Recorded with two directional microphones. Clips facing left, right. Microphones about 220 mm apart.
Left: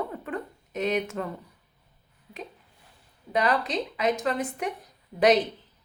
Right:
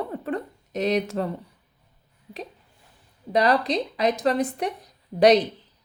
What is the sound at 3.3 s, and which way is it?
A woman's voice, 35° right (ahead or behind).